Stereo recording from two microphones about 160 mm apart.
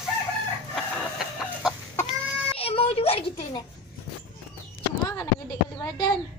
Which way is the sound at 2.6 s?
35° left (ahead or behind).